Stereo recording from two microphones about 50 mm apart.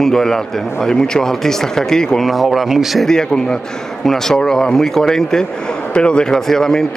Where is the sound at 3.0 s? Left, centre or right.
Centre.